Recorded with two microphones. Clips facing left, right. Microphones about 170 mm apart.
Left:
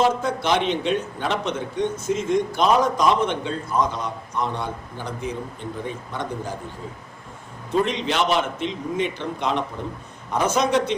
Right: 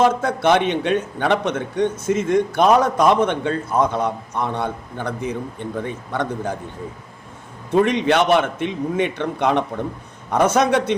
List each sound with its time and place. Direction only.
0.0 s a man's voice: 60° right (ahead or behind)
7.9 s a man's voice: 60° right (ahead or behind)